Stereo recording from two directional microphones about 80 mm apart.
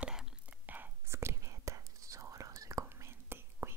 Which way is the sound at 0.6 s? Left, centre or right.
Right.